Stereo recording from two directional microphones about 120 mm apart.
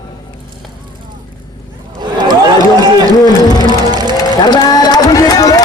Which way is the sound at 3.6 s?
35° right (ahead or behind).